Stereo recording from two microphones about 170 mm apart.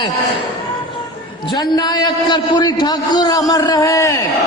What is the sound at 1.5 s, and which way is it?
A man's voice, 25° left (ahead or behind).